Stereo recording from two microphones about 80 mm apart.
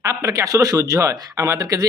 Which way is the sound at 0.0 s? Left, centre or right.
Right.